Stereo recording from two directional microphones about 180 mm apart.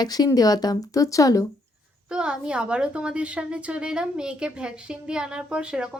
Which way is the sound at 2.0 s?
5° right (ahead or behind).